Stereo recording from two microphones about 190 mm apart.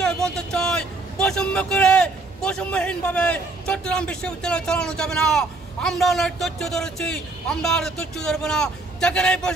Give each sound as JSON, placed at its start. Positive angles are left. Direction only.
{"t": 0.0, "sound": "a man's voice", "side_deg": 5}